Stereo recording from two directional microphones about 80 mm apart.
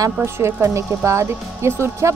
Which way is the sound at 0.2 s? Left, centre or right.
Right.